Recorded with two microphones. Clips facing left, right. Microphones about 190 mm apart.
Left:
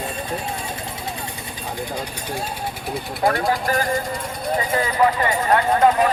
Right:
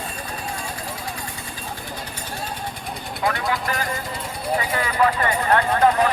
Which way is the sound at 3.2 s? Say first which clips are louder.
Left 4 dB; 50° left (ahead or behind).